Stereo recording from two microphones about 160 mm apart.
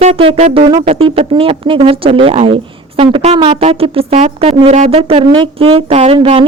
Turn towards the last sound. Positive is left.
turn(degrees=-35)  # may be behind; listen again after turning